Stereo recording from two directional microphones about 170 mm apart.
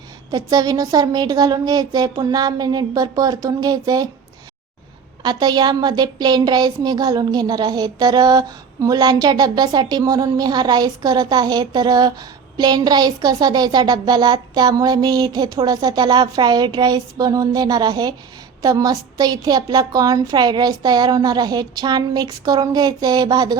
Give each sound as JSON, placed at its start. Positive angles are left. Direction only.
{"t": 0.3, "sound": "a woman's voice", "side_deg": -20}
{"t": 5.2, "sound": "a woman's voice", "side_deg": -25}